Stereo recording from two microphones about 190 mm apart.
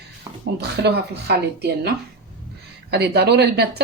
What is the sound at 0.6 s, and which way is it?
Speech, 60° right (ahead or behind).